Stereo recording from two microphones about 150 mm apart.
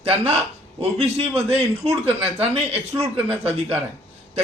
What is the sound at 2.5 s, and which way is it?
Speech, 40° right (ahead or behind).